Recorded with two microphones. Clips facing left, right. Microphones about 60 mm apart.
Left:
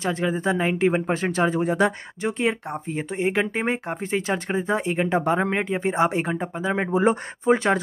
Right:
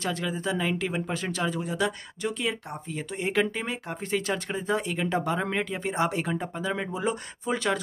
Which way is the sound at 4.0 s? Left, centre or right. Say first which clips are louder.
Left 4 dB; left.